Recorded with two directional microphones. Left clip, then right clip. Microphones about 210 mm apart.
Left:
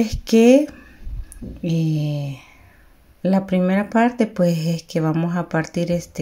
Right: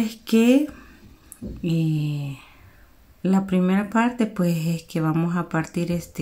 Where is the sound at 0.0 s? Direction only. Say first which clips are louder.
Left 6 dB; 15° left (ahead or behind).